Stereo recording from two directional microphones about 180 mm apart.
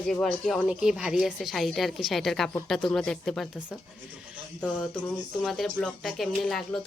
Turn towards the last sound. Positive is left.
turn(degrees=0)  # may be behind; listen again after turning